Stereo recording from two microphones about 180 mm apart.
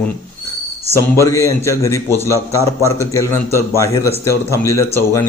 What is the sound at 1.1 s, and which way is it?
A man's voice, 15° left (ahead or behind).